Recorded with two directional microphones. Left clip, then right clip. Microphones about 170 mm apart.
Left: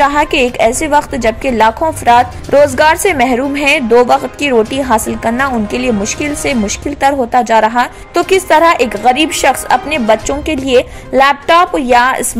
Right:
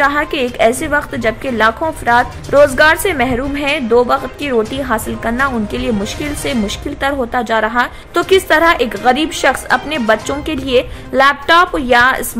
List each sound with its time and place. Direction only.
0.0 s a woman's voice: 20° left (ahead or behind)